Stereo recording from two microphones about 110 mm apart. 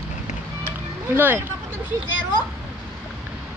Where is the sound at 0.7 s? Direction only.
20° right (ahead or behind).